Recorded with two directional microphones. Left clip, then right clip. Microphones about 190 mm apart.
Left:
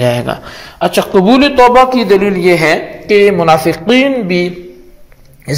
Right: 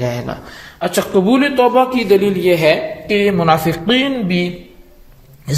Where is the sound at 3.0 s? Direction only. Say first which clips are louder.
Left 10 dB; 15° left (ahead or behind).